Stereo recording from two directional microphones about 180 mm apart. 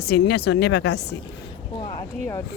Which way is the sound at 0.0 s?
65° left (ahead or behind).